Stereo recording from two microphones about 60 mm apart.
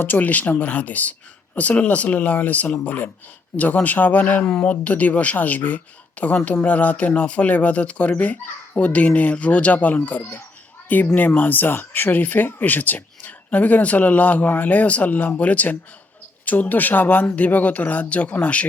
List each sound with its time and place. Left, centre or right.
0.0 s speech: left
4.4 s speech: centre